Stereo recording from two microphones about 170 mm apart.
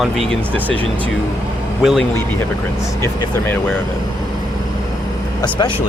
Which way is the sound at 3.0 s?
15° left (ahead or behind).